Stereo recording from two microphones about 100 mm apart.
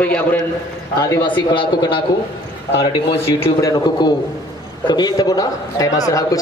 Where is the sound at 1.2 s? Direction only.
55° left (ahead or behind).